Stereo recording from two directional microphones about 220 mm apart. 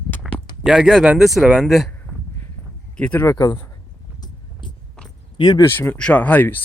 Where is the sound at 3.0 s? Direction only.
10° left (ahead or behind).